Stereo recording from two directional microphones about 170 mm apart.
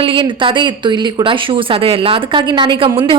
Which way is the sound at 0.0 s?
30° right (ahead or behind).